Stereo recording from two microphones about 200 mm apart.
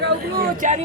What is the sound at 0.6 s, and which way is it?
Speech, 35° right (ahead or behind).